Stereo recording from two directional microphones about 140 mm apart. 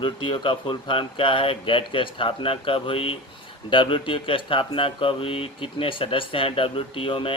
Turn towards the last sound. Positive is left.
turn(degrees=40)  # may be behind; listen again after turning